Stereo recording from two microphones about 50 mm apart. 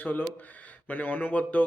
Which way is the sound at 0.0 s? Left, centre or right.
Left.